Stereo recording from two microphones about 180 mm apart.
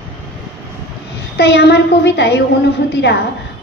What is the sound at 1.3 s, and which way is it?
A woman's voice, 70° left (ahead or behind).